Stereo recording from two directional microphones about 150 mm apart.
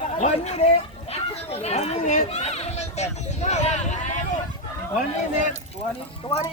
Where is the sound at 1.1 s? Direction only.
45° left (ahead or behind).